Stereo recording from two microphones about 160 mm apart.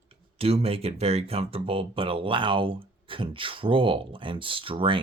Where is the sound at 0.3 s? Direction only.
40° right (ahead or behind).